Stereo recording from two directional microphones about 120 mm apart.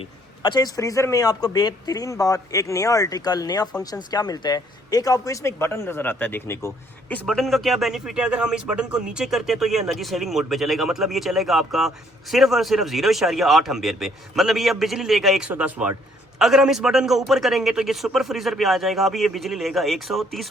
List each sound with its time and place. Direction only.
0.0 s a man's voice: 40° left (ahead or behind); by 7.2 s 20° left (ahead or behind)
7.3 s a man's voice: centre (ahead or behind)
15.4 s a man's voice: 10° right (ahead or behind)